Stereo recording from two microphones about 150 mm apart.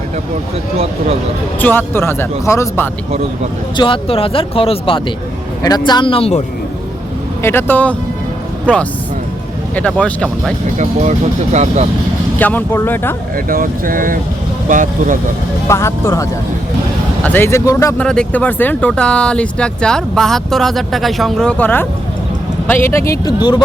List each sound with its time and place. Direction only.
1.5 s speech: 15° left (ahead or behind)
3.8 s speech: 35° left (ahead or behind)
7.4 s speech: 15° left (ahead or behind)
11.5 s speech: 50° right (ahead or behind)
12.4 s speech: 10° left (ahead or behind)
13.3 s speech: 70° right (ahead or behind)
15.6 s speech: 20° left (ahead or behind)
17.2 s speech: 15° left (ahead or behind)
17.9 s speech: 5° left (ahead or behind)